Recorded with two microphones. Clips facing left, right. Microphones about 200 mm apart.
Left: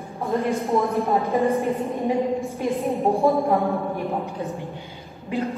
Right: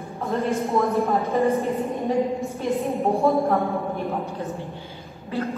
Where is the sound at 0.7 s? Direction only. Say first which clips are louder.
Left 1 dB; 15° left (ahead or behind).